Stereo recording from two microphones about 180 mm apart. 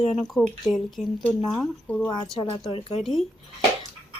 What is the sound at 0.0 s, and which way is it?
Speech, 5° left (ahead or behind).